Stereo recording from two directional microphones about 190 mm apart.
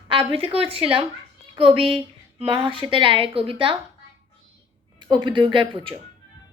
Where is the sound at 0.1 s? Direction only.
30° right (ahead or behind).